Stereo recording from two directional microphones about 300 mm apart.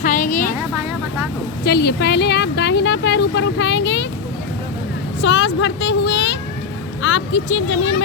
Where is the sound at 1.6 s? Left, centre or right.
Left.